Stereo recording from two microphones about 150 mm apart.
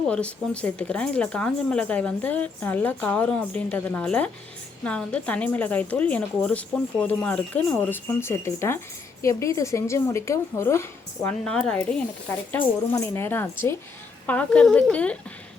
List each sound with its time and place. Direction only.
0.1 s a woman's voice: 5° left (ahead or behind)
11.4 s speech: 5° left (ahead or behind)